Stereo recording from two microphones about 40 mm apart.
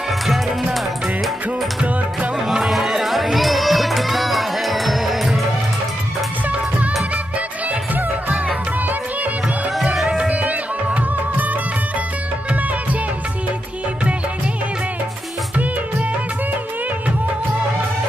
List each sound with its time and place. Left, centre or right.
2.7 s music: centre
10.0 s music: right